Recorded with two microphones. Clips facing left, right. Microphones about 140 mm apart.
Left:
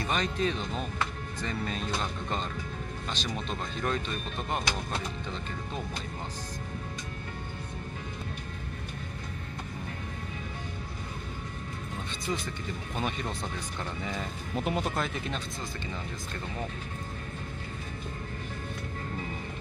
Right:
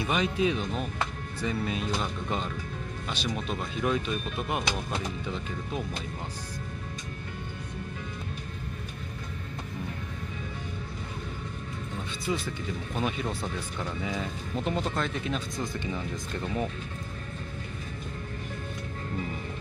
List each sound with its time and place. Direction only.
0.0 s speech: 10° right (ahead or behind)
12.3 s speech: 5° right (ahead or behind)
15.6 s speech: 15° right (ahead or behind)